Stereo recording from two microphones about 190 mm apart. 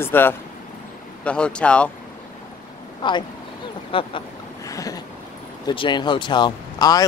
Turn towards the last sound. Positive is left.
turn(degrees=20)  # may be behind; listen again after turning